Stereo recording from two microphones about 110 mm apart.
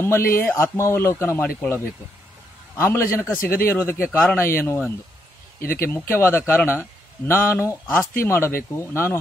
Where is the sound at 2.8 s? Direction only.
25° left (ahead or behind).